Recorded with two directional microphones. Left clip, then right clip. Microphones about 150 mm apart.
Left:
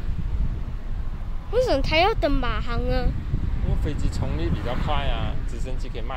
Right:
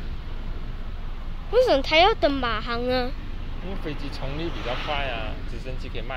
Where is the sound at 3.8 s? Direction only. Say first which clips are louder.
Even; 50° left (ahead or behind).